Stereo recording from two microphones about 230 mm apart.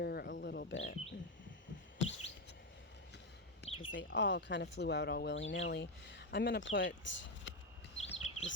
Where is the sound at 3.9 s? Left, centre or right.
Left.